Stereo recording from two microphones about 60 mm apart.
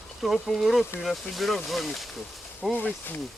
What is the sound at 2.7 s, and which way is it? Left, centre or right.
Speech, left.